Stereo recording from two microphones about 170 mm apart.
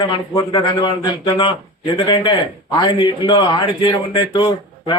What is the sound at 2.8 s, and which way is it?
A man's voice, 30° left (ahead or behind).